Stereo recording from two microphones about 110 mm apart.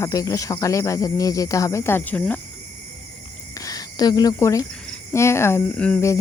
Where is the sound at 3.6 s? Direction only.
35° left (ahead or behind).